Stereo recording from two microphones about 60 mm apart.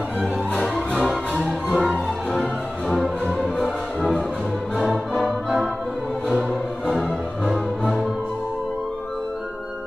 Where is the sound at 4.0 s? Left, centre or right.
Centre.